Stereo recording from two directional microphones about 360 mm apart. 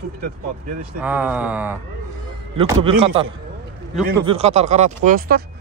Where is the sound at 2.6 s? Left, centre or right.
Centre.